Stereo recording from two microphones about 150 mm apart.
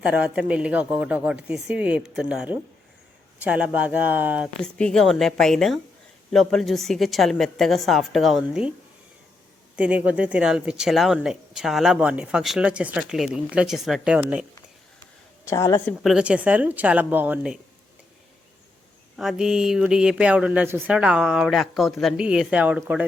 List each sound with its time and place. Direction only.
0.0 s speech: 10° right (ahead or behind)
4.6 s speech: 5° left (ahead or behind)
9.7 s speech: 10° right (ahead or behind)
15.4 s a woman's voice: 20° left (ahead or behind)
15.9 s speech: 5° right (ahead or behind)
19.1 s speech: centre (ahead or behind)